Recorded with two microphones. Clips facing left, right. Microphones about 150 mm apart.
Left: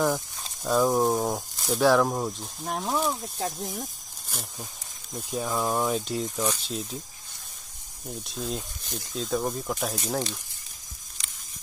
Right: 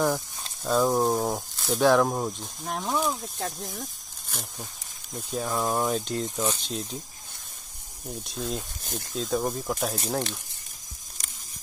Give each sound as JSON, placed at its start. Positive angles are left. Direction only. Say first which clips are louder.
{"t": 0.0, "sound": "speech", "louder": "even", "side_deg": 5}
{"t": 8.1, "sound": "speech", "louder": "right 1 dB", "side_deg": 0}
{"t": 8.8, "sound": "speech", "louder": "right 2 dB", "side_deg": -55}
{"t": 9.1, "sound": "speech", "louder": "right 1 dB", "side_deg": 0}